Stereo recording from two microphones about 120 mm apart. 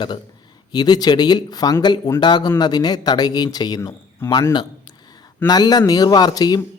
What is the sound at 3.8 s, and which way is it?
Speech, 20° left (ahead or behind).